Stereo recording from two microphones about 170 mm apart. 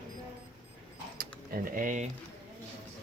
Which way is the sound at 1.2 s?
60° right (ahead or behind).